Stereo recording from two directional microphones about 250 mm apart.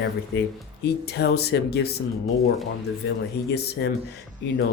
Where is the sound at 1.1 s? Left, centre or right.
Left.